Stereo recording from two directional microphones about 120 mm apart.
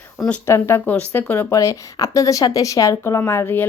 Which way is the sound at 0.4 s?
20° left (ahead or behind).